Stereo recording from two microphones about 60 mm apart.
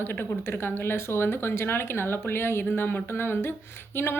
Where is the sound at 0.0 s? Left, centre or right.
Left.